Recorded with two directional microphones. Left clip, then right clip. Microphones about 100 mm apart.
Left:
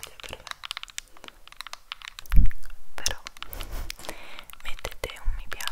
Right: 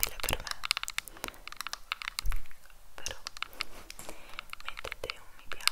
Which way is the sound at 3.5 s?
35° left (ahead or behind).